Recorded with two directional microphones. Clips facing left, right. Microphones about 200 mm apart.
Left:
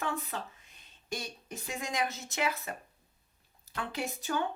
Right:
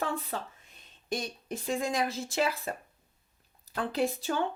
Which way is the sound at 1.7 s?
30° right (ahead or behind).